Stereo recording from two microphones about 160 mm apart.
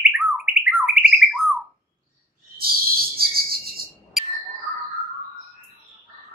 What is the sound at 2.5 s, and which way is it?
Bird, 70° right (ahead or behind).